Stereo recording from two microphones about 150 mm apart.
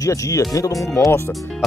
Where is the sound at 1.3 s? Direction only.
Centre (ahead or behind).